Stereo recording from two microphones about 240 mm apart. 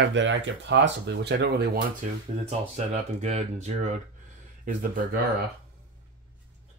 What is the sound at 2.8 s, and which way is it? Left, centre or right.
Speech, right.